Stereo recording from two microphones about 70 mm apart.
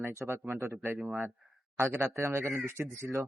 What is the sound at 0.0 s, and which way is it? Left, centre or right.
Speech, right.